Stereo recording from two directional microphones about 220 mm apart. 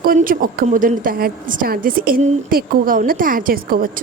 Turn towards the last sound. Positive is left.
turn(degrees=-40)  # may be behind; listen again after turning